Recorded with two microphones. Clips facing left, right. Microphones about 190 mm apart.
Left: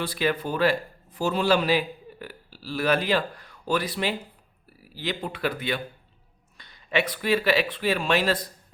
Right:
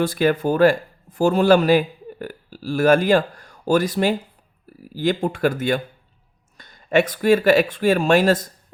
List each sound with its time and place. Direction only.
0.0 s speech: 50° right (ahead or behind)